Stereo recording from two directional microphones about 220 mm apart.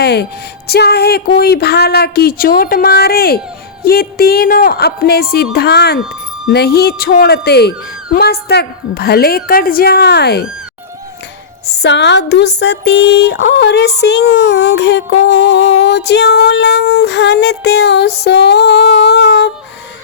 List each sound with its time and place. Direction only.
0.0 s speech: 45° left (ahead or behind)
0.7 s music: 45° left (ahead or behind)
11.7 s music: 50° left (ahead or behind)